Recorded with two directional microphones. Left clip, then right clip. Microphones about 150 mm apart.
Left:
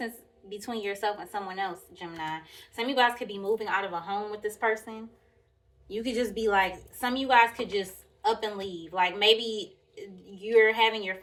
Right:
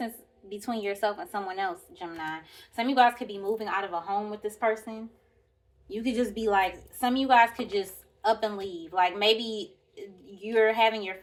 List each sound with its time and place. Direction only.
0.0 s a woman's voice: 30° right (ahead or behind)